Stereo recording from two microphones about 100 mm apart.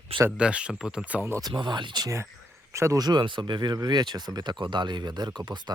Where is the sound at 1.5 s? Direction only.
50° right (ahead or behind).